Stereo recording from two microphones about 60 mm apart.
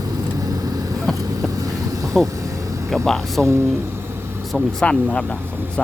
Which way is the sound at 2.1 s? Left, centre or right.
Centre.